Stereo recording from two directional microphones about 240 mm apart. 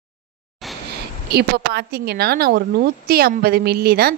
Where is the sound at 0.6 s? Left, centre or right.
Centre.